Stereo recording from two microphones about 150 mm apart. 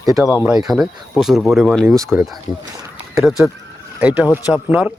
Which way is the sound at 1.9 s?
20° right (ahead or behind).